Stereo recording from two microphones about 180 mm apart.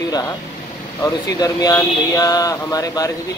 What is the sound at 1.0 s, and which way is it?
Speech, 20° left (ahead or behind).